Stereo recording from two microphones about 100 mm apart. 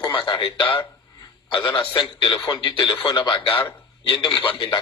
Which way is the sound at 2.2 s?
45° left (ahead or behind).